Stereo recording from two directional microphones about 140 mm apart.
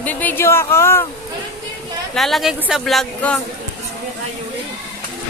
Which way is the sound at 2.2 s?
Centre (ahead or behind).